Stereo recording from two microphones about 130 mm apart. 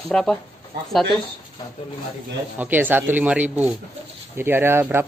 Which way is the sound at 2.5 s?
15° right (ahead or behind).